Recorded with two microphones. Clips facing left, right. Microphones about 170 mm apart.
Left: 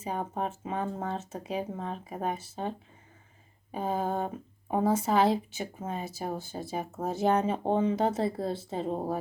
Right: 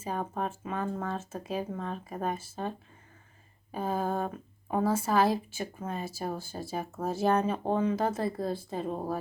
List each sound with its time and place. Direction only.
0.0 s speech: 20° left (ahead or behind)